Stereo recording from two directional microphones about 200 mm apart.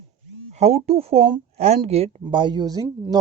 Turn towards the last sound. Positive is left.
turn(degrees=-15)  # may be behind; listen again after turning